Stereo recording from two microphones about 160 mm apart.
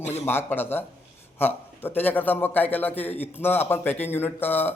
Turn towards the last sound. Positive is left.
turn(degrees=10)  # may be behind; listen again after turning